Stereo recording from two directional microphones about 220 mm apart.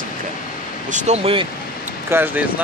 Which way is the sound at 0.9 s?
30° right (ahead or behind).